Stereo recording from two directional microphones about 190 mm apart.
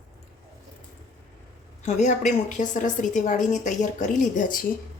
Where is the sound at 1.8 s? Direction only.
40° left (ahead or behind).